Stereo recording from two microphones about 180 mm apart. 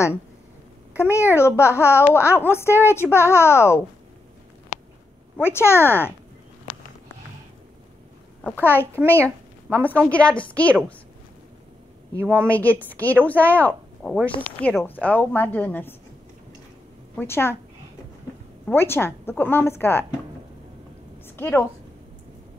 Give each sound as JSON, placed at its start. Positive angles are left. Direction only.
{"t": 1.1, "sound": "a woman's voice", "side_deg": 15}
{"t": 4.7, "sound": "a sound", "side_deg": 45}
{"t": 5.4, "sound": "a woman's voice", "side_deg": 15}
{"t": 8.5, "sound": "a woman's voice", "side_deg": 10}
{"t": 12.1, "sound": "a woman's voice", "side_deg": -15}
{"t": 12.5, "sound": "a woman's voice", "side_deg": 10}
{"t": 17.2, "sound": "a woman's voice", "side_deg": 15}
{"t": 18.7, "sound": "a woman's voice", "side_deg": 10}
{"t": 21.4, "sound": "a woman's voice", "side_deg": 10}